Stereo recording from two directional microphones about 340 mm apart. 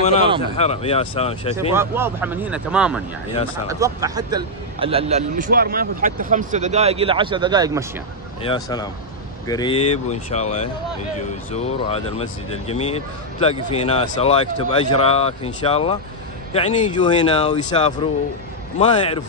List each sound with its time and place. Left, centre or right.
0.4 s speech: centre
1.7 s a man's voice: centre
8.5 s speech: centre